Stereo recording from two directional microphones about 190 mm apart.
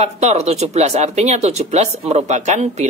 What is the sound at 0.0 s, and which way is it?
Speech, 35° right (ahead or behind).